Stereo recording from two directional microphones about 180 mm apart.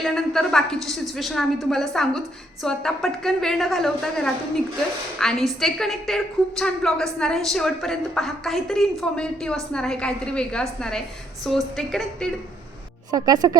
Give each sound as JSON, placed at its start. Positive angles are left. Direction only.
{"t": 0.0, "sound": "a woman's voice", "side_deg": 0}
{"t": 13.1, "sound": "a woman's voice", "side_deg": -20}